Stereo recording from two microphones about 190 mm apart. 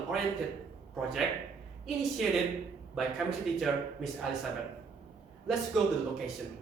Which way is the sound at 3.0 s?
Centre (ahead or behind).